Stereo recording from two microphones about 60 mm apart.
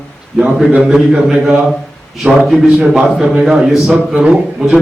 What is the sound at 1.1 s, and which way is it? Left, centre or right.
A man's voice, centre.